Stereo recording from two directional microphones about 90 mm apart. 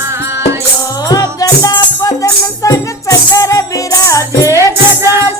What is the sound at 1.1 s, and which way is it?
Music, 45° left (ahead or behind).